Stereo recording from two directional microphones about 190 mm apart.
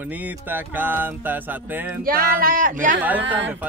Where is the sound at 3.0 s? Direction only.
10° right (ahead or behind).